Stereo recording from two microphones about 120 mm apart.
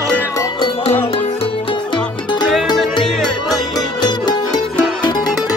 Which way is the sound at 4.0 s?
35° left (ahead or behind).